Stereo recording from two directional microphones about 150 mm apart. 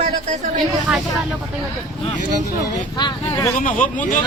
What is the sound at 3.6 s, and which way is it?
Speech, 60° left (ahead or behind).